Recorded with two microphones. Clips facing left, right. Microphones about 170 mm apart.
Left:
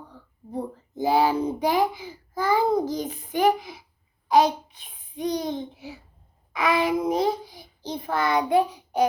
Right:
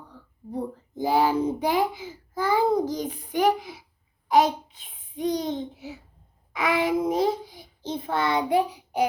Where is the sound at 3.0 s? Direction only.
10° right (ahead or behind).